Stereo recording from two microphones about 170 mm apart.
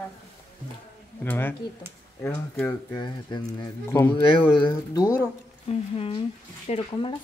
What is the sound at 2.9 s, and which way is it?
Speech, 25° left (ahead or behind).